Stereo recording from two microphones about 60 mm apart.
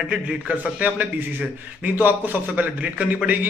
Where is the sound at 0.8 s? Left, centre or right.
Right.